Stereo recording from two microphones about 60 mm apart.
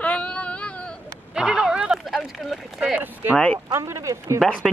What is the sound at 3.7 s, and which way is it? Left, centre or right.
Speech, right.